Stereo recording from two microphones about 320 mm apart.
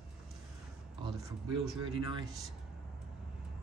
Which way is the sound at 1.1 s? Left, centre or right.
Centre.